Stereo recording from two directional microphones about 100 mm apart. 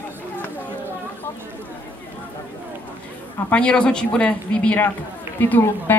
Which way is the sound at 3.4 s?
10° left (ahead or behind).